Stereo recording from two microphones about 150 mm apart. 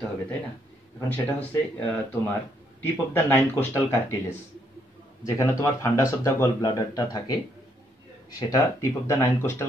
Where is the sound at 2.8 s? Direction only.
10° left (ahead or behind).